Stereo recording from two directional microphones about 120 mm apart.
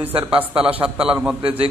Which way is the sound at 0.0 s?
15° right (ahead or behind).